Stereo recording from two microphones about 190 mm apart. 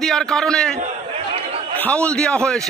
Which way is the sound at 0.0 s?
Centre (ahead or behind).